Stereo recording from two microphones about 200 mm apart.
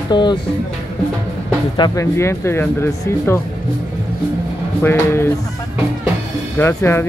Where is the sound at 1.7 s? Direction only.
20° left (ahead or behind).